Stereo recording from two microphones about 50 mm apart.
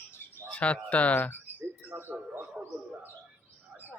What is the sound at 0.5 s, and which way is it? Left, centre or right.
Speech, left.